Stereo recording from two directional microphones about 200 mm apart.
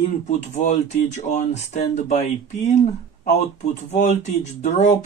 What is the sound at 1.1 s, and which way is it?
Speech, 35° left (ahead or behind).